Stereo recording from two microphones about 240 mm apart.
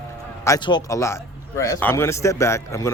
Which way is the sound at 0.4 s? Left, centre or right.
Centre.